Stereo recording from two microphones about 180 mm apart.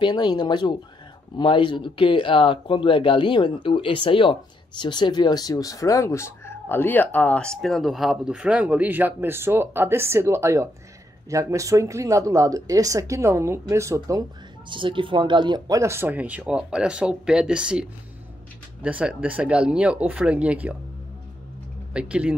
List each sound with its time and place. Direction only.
0.0 s speech: 25° left (ahead or behind); by 20.7 s 10° right (ahead or behind)
21.9 s speech: 5° right (ahead or behind)